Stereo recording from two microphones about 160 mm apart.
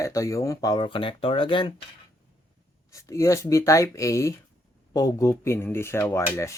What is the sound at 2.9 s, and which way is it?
Speech, 20° left (ahead or behind).